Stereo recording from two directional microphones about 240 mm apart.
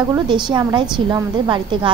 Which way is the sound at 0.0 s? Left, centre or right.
Centre.